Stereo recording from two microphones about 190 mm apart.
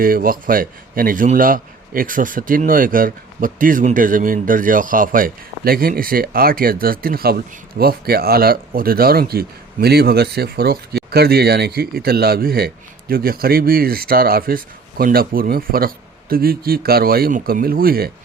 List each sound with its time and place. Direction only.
0.0 s a man's voice: 50° right (ahead or behind)